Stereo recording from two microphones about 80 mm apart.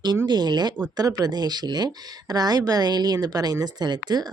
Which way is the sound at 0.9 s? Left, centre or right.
Right.